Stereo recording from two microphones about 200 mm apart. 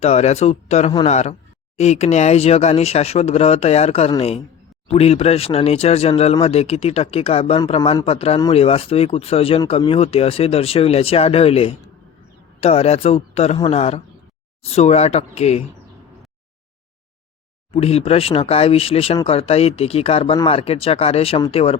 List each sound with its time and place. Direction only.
0.0 s speech: 30° left (ahead or behind)
17.7 s speech: 30° left (ahead or behind)